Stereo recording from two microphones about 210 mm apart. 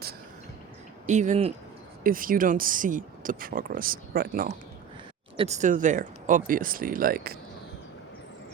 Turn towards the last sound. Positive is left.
turn(degrees=-45)  # may be behind; listen again after turning